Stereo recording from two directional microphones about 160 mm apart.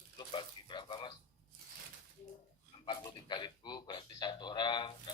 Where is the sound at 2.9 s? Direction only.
25° left (ahead or behind).